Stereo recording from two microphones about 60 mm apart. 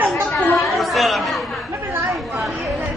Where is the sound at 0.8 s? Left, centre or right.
Centre.